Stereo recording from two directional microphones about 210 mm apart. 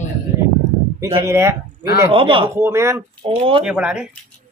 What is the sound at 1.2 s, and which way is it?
Speech, 15° right (ahead or behind).